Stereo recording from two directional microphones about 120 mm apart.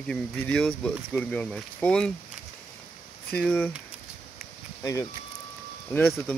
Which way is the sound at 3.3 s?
10° left (ahead or behind).